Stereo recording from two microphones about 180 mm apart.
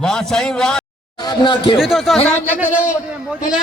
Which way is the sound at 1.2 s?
25° left (ahead or behind).